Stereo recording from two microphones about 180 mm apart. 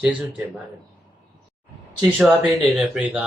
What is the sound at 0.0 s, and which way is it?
Speech, 5° right (ahead or behind).